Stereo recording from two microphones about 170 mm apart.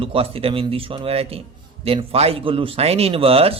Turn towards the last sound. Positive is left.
turn(degrees=-35)  # may be behind; listen again after turning